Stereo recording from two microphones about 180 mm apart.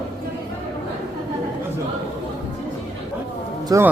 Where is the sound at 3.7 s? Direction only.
20° right (ahead or behind).